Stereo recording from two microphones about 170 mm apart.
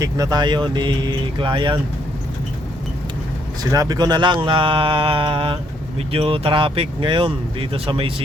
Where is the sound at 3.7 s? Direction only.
20° right (ahead or behind).